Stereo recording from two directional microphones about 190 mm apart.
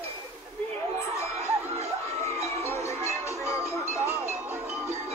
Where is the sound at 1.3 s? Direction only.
10° right (ahead or behind).